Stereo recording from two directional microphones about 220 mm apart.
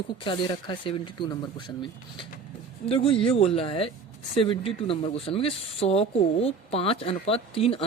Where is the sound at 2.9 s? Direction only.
25° left (ahead or behind).